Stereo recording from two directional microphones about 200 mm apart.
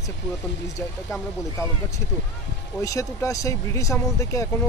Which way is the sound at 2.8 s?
15° left (ahead or behind).